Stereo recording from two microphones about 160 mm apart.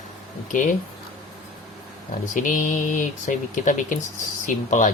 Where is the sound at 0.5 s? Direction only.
55° left (ahead or behind).